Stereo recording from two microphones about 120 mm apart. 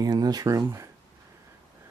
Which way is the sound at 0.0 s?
35° right (ahead or behind).